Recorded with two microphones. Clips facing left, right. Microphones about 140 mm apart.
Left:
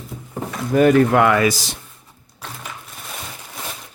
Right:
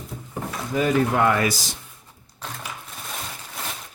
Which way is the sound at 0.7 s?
65° left (ahead or behind).